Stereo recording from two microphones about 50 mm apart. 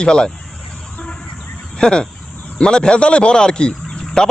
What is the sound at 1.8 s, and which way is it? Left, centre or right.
Speech, centre.